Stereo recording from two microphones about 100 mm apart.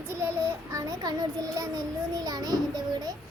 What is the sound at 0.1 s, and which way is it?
Child singing, 25° right (ahead or behind).